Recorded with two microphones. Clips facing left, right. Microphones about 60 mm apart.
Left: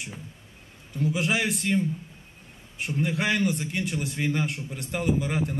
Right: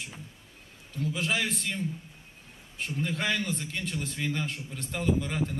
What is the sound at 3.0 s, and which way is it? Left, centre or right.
A man's voice, centre.